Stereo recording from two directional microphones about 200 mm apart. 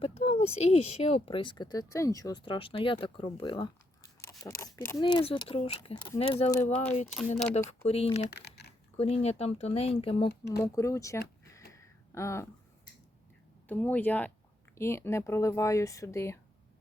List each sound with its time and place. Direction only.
0.0 s speech: 30° left (ahead or behind)
7.9 s speech: 30° left (ahead or behind)
8.3 s a sound: 55° left (ahead or behind)
9.0 s speech: 30° left (ahead or behind)
10.2 s speech: 55° left (ahead or behind)
10.6 s a sound: 15° left (ahead or behind)
13.7 s speech: 10° left (ahead or behind)